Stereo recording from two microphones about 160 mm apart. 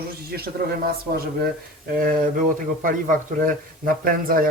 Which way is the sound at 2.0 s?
60° right (ahead or behind).